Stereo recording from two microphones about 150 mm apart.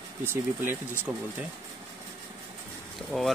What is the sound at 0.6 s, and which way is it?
Speech, 10° right (ahead or behind).